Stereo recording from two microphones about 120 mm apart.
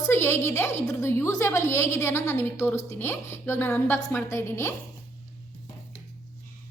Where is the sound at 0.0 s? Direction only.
20° left (ahead or behind).